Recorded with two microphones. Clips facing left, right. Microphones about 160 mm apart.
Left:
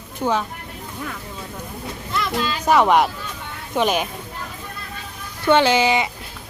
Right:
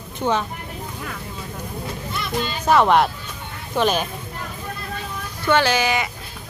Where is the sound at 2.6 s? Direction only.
10° left (ahead or behind).